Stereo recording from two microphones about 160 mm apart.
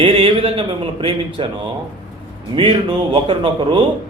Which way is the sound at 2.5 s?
35° right (ahead or behind).